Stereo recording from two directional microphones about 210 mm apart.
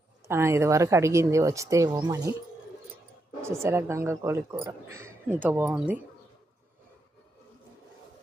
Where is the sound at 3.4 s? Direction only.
10° right (ahead or behind).